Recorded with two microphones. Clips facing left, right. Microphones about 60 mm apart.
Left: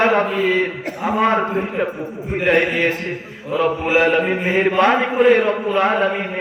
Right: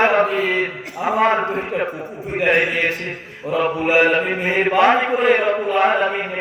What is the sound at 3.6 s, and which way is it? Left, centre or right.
A man's voice, centre.